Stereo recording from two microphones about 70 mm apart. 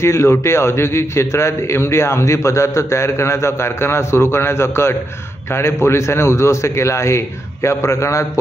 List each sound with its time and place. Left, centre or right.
0.0 s a man's voice: left